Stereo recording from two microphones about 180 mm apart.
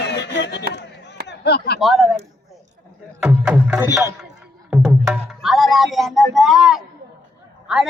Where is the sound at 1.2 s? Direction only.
70° left (ahead or behind).